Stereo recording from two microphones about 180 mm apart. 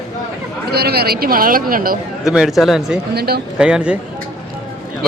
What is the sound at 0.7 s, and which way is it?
Speech, 60° right (ahead or behind).